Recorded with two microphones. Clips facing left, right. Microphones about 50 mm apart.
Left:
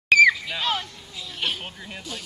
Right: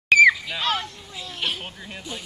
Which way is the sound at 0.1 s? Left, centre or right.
Centre.